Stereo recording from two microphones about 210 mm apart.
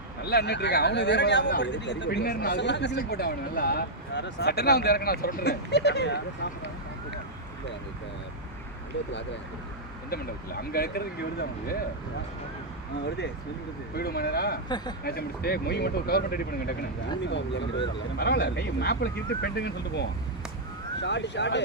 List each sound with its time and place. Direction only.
0.3 s speech: 50° left (ahead or behind)
10.6 s speech: 45° left (ahead or behind)
13.9 s speech: 50° left (ahead or behind)
17.2 s speech: 55° left (ahead or behind)